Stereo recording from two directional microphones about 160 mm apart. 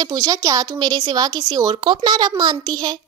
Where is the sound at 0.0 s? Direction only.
25° right (ahead or behind).